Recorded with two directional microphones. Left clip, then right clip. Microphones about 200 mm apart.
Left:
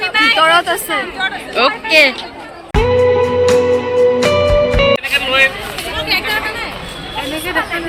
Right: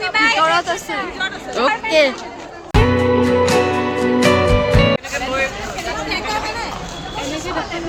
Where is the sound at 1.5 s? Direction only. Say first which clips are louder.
Left 4 dB; 15° right (ahead or behind).